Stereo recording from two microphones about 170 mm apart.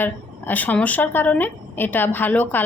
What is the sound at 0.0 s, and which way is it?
Speech, 10° left (ahead or behind).